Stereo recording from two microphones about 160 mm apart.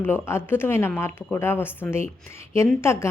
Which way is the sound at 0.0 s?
15° left (ahead or behind).